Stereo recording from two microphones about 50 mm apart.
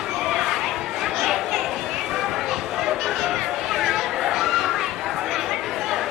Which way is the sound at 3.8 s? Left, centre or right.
Centre.